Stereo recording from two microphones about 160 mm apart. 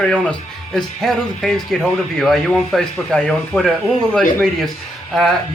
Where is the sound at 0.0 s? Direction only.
5° left (ahead or behind).